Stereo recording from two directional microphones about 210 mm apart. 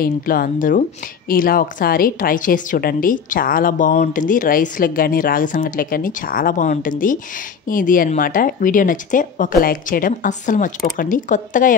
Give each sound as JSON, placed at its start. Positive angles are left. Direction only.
{"t": 0.0, "sound": "a woman's voice", "side_deg": 40}